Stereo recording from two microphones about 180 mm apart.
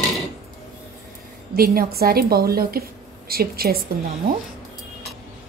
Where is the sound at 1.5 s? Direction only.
55° right (ahead or behind).